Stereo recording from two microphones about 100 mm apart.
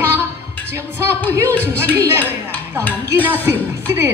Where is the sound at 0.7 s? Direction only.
25° right (ahead or behind).